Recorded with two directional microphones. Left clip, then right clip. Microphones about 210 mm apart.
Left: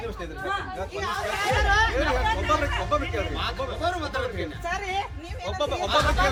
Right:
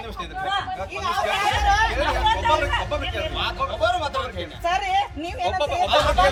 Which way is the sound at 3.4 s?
5° left (ahead or behind).